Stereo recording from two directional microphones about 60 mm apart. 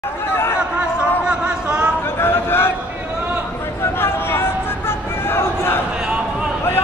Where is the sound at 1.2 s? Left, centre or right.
Centre.